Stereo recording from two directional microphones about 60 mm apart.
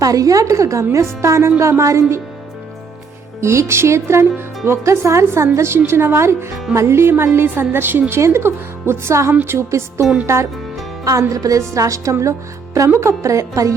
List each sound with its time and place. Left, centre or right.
0.0 s a woman's voice: right
3.4 s a woman's voice: right
8.1 s speech: right
11.0 s a woman's voice: right